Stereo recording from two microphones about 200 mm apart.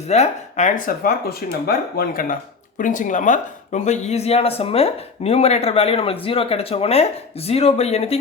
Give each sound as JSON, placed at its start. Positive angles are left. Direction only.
{"t": 0.1, "sound": "speech", "side_deg": 35}